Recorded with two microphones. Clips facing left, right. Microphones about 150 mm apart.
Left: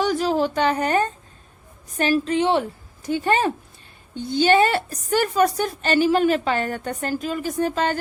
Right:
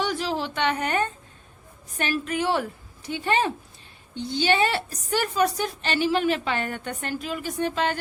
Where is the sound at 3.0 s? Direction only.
45° left (ahead or behind).